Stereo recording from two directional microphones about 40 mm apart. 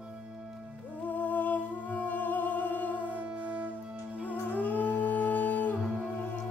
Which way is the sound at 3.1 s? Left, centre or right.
Right.